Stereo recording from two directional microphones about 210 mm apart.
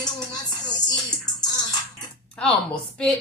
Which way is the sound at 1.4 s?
20° left (ahead or behind).